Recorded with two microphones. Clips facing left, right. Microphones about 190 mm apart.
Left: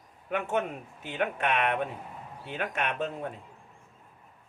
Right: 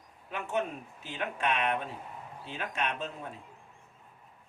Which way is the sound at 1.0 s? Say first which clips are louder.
Left 3 dB; 60° left (ahead or behind).